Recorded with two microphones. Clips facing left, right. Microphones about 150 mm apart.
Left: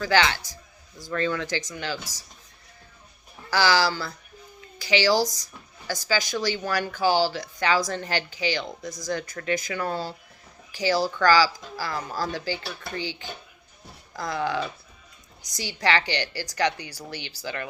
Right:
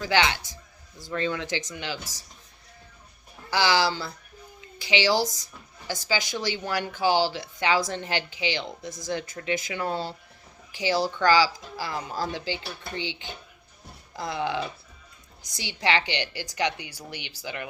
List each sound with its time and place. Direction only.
0.0 s a woman's voice: 20° right (ahead or behind)
0.5 s a sound: 45° left (ahead or behind)
1.1 s a woman's voice: 20° right (ahead or behind)
3.5 s a woman's voice: 20° right (ahead or behind)